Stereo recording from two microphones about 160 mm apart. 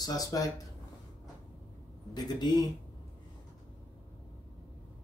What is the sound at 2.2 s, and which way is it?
Speech, 25° left (ahead or behind).